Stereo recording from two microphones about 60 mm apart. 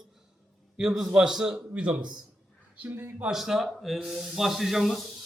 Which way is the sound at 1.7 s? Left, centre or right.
Right.